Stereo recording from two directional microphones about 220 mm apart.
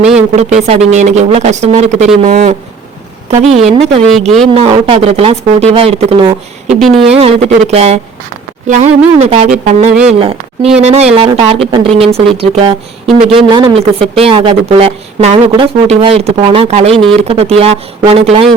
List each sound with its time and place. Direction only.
0.0 s speech: 5° right (ahead or behind)
0.3 s speech: 30° right (ahead or behind)
6.7 s a woman's voice: centre (ahead or behind)
7.1 s speech: 25° right (ahead or behind)
9.9 s a woman's voice: 5° right (ahead or behind)
10.2 s a woman's voice: 25° right (ahead or behind)